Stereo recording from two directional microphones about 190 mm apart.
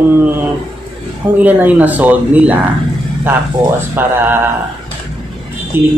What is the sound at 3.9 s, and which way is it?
Speech, 10° right (ahead or behind).